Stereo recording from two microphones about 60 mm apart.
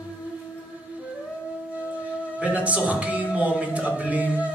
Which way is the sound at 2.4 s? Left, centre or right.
Right.